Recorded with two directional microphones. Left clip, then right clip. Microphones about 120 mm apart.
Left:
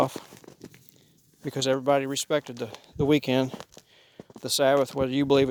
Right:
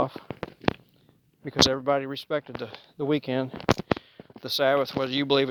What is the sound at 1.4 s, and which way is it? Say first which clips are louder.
Speech: right 2 dB; 90° left.